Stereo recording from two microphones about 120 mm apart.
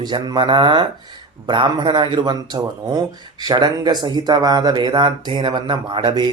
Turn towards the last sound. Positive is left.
turn(degrees=-45)  # may be behind; listen again after turning